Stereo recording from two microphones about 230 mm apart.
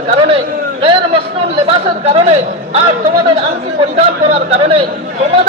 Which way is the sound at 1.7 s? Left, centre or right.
Right.